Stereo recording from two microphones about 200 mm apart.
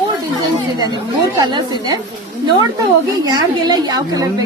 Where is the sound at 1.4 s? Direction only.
20° right (ahead or behind).